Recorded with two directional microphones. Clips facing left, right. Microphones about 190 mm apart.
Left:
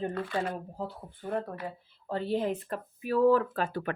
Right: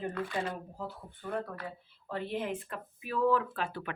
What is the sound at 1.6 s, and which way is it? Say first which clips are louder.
Speech: left 5 dB; 35° left (ahead or behind).